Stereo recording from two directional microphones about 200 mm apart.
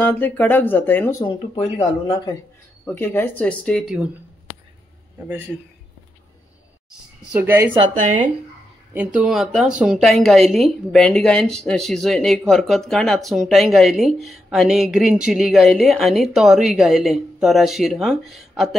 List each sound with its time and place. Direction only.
0.0 s speech: 5° left (ahead or behind)
1.2 s speech: 25° left (ahead or behind); by 4.1 s centre (ahead or behind)
7.3 s a woman's voice: 10° right (ahead or behind)
7.9 s speech: 40° right (ahead or behind)
8.9 s speech: 5° right (ahead or behind)